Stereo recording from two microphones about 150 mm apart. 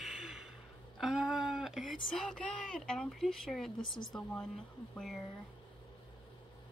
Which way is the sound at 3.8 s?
30° left (ahead or behind).